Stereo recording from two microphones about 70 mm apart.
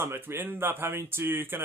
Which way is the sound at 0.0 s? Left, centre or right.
Right.